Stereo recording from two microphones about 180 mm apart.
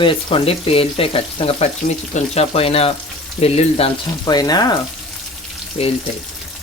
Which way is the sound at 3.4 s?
35° left (ahead or behind).